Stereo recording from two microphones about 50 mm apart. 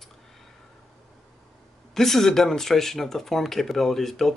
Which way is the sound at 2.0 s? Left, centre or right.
Centre.